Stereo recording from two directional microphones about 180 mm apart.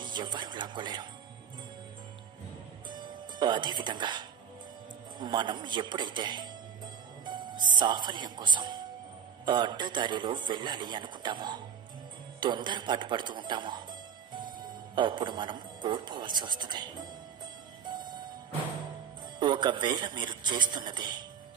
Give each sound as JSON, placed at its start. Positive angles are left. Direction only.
{"t": 0.0, "sound": "speech", "side_deg": -25}
{"t": 2.9, "sound": "music", "side_deg": -25}
{"t": 5.2, "sound": "a man's voice", "side_deg": -25}
{"t": 15.0, "sound": "a man's voice", "side_deg": -25}
{"t": 17.8, "sound": "music", "side_deg": -25}
{"t": 19.4, "sound": "a man's voice", "side_deg": -25}